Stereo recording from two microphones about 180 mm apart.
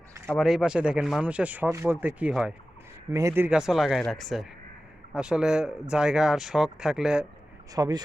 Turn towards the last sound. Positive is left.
turn(degrees=-20)  # may be behind; listen again after turning